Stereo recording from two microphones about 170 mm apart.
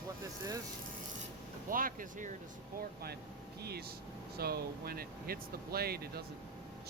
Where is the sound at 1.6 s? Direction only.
55° right (ahead or behind).